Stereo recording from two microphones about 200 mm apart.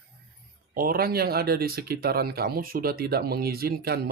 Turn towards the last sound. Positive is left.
turn(degrees=-50)  # may be behind; listen again after turning